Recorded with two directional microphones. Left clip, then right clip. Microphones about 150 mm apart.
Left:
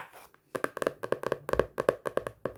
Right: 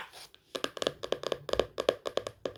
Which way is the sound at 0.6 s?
25° left (ahead or behind).